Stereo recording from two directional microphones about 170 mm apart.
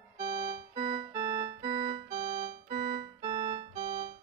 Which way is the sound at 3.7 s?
60° right (ahead or behind).